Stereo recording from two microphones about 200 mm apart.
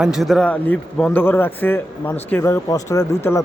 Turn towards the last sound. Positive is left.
turn(degrees=15)  # may be behind; listen again after turning